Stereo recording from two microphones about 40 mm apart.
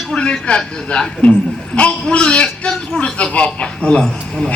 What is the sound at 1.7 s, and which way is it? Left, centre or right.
A man's voice, left.